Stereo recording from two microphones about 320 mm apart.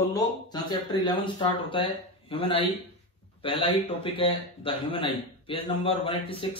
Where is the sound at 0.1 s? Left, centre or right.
Centre.